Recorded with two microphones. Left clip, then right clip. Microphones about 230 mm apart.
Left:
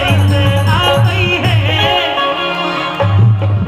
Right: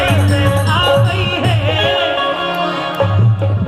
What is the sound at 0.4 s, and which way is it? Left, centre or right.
Music, left.